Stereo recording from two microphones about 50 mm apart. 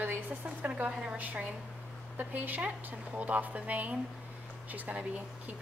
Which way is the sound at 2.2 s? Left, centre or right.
Right.